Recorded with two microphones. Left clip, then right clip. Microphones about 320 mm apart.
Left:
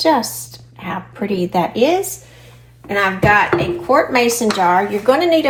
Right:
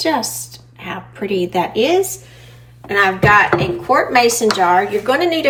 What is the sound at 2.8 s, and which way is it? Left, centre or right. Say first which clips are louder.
A woman's voice: right 2 dB; centre.